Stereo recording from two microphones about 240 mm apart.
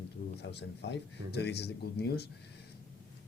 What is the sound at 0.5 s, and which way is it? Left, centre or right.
Speech, left.